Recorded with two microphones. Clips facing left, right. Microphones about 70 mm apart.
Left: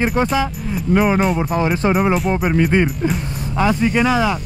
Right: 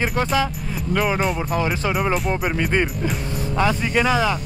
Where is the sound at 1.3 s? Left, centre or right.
Centre.